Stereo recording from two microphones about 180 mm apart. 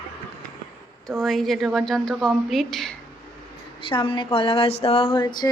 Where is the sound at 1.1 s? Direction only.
Centre (ahead or behind).